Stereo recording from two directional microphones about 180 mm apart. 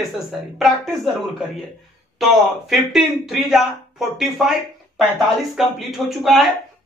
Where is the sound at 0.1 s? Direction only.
Centre (ahead or behind).